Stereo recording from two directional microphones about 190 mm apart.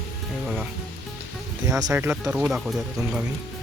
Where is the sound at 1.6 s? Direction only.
15° right (ahead or behind); by 3.2 s centre (ahead or behind).